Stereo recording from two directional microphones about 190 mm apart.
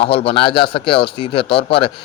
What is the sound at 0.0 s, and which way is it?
Speech, 30° left (ahead or behind).